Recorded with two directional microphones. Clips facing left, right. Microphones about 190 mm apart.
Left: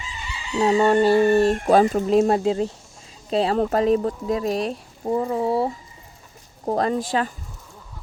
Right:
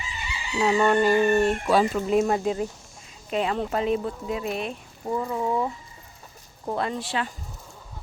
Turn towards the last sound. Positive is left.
turn(degrees=45)  # may be behind; listen again after turning